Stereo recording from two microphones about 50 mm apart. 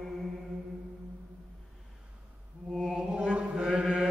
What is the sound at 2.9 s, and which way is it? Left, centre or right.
Chant, centre.